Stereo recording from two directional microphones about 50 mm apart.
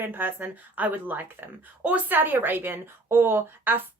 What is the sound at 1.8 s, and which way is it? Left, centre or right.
Speech, right.